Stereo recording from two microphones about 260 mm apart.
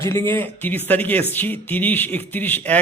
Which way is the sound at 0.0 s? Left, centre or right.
Centre.